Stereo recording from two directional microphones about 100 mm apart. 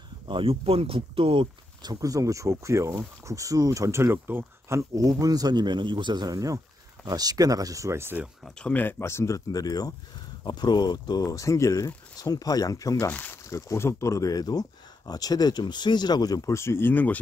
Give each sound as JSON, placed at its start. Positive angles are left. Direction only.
{"t": 0.3, "sound": "speech", "side_deg": -65}
{"t": 1.9, "sound": "speech", "side_deg": -35}
{"t": 8.5, "sound": "speech", "side_deg": 5}
{"t": 8.7, "sound": "speech", "side_deg": 20}
{"t": 13.1, "sound": "speech", "side_deg": 15}
{"t": 13.5, "sound": "speech", "side_deg": 30}